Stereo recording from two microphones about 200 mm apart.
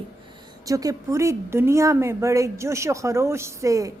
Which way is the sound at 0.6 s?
15° right (ahead or behind).